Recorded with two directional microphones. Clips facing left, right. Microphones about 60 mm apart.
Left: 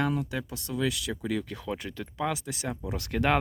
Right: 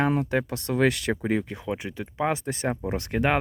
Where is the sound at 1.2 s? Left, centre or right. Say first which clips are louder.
Right 5 dB; right.